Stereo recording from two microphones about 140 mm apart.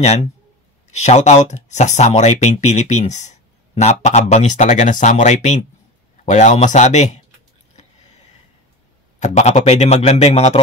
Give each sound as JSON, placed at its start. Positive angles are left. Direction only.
{"t": 0.0, "sound": "a man's voice", "side_deg": 50}
{"t": 9.2, "sound": "a man's voice", "side_deg": 55}